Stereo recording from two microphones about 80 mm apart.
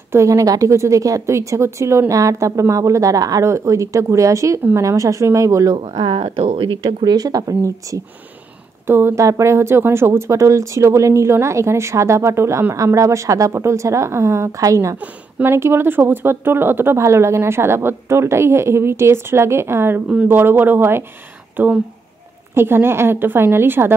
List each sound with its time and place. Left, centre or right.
0.1 s speech: right
5.8 s speech: right
7.2 s speech: right
8.8 s speech: right
15.0 s speech: centre
15.5 s a woman's voice: right